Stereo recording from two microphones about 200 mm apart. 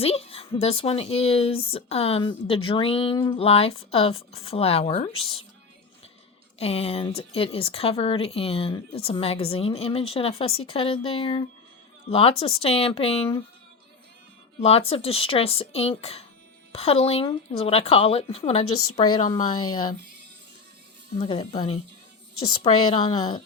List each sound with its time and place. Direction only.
0.0 s speech: 30° left (ahead or behind)
6.6 s speech: 30° left (ahead or behind)
14.6 s speech: 30° left (ahead or behind)
18.6 s a woman's voice: 90° left
18.9 s speech: 25° left (ahead or behind)
21.2 s speech: 25° left (ahead or behind)
22.4 s a woman's voice: 90° left
22.6 s speech: 25° left (ahead or behind)